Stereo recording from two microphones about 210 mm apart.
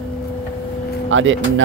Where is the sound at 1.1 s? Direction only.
65° right (ahead or behind).